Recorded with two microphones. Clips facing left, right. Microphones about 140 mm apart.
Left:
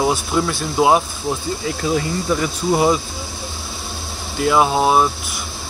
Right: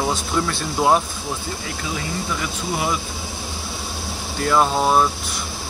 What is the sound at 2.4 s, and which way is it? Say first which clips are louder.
Speech: left 7 dB; 35° left (ahead or behind).